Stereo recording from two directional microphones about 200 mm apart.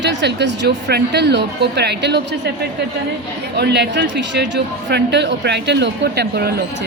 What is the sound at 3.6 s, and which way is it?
A man's voice, 55° right (ahead or behind).